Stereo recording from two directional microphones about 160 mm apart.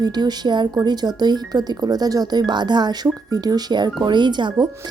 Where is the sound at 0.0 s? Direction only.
25° right (ahead or behind).